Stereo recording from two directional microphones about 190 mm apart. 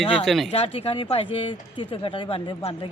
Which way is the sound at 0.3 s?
Centre (ahead or behind).